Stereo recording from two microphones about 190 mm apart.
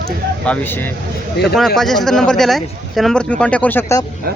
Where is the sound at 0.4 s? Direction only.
10° left (ahead or behind).